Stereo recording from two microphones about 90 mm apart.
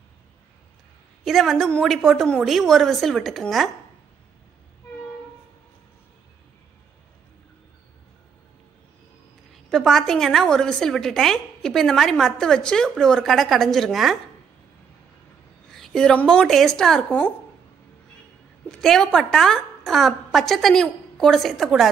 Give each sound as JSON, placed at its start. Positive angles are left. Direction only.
{"t": 1.2, "sound": "a woman's voice", "side_deg": 0}
{"t": 9.5, "sound": "a woman's voice", "side_deg": 5}
{"t": 15.7, "sound": "a woman's voice", "side_deg": 5}
{"t": 18.7, "sound": "a woman's voice", "side_deg": 5}